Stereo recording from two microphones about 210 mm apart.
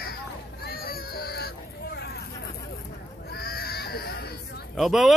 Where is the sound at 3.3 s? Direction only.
45° left (ahead or behind).